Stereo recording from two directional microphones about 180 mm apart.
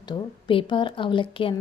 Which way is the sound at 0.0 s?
25° left (ahead or behind).